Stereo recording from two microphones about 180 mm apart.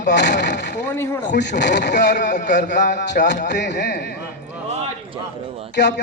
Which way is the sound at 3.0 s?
75° left (ahead or behind).